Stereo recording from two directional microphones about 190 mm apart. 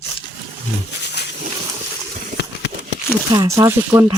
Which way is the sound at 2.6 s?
65° left (ahead or behind).